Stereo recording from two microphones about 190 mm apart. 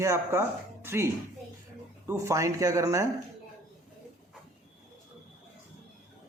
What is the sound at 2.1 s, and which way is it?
Speech, 15° right (ahead or behind).